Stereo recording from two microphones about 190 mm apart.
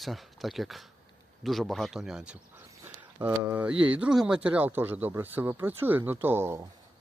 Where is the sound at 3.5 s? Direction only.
10° right (ahead or behind).